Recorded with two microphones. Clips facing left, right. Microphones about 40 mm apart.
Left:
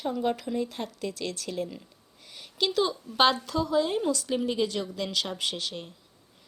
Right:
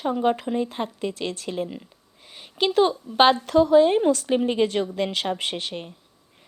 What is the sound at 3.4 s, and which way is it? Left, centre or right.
Speech, right.